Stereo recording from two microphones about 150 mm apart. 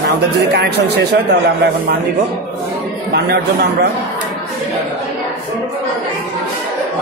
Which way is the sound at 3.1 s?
90° right.